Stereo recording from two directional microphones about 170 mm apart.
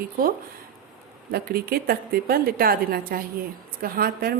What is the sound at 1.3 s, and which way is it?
A woman's voice, 65° right (ahead or behind).